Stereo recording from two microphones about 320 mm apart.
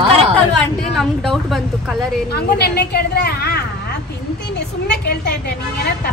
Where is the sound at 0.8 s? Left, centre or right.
Centre.